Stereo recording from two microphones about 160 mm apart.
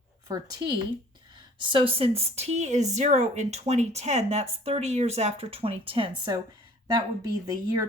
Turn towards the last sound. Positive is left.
turn(degrees=-20)  # may be behind; listen again after turning